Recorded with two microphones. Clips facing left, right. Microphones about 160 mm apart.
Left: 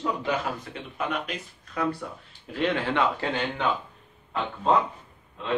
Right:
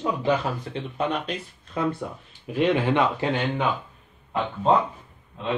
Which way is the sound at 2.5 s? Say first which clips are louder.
Right 5 dB; 15° right (ahead or behind).